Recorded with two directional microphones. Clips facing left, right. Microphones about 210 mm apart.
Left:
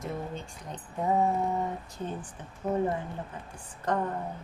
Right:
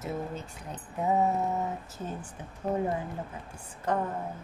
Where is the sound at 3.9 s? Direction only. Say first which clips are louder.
Even; 10° right (ahead or behind).